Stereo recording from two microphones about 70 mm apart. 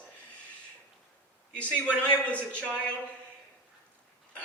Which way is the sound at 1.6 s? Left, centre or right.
Centre.